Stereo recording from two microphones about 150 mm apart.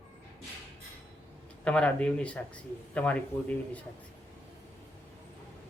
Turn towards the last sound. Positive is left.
turn(degrees=10)  # may be behind; listen again after turning